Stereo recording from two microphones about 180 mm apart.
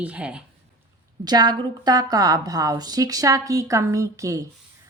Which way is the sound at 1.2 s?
20° right (ahead or behind).